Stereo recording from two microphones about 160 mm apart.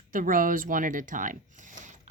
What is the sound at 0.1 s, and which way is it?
Speech, 60° right (ahead or behind).